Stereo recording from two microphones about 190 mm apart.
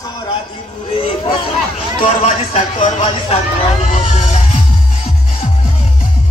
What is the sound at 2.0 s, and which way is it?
Speech, 35° left (ahead or behind).